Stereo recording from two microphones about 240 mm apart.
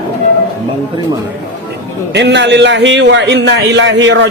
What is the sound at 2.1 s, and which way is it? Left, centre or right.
A man's voice, right.